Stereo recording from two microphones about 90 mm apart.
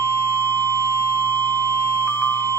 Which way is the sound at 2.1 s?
30° left (ahead or behind).